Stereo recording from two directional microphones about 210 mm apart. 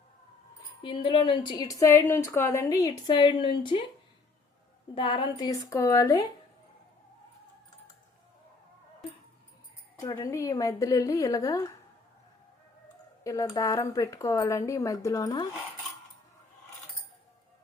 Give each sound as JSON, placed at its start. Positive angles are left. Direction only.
{"t": 0.8, "sound": "a woman's voice", "side_deg": 25}
{"t": 4.9, "sound": "speech", "side_deg": 20}
{"t": 10.0, "sound": "speech", "side_deg": 15}
{"t": 13.2, "sound": "speech", "side_deg": 15}